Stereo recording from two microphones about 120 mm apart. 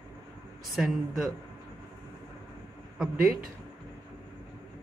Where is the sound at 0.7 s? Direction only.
Centre (ahead or behind).